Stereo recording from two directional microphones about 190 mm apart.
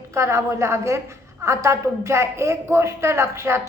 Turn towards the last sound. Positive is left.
turn(degrees=-15)  # may be behind; listen again after turning